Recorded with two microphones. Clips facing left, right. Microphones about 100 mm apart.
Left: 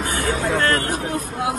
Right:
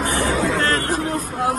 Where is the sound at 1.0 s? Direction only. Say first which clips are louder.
Right 2 dB; 45° right (ahead or behind).